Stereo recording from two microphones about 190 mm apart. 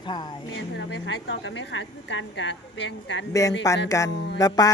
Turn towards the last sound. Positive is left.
turn(degrees=20)  # may be behind; listen again after turning